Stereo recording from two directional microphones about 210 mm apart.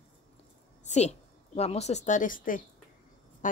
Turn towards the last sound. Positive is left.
turn(degrees=40)  # may be behind; listen again after turning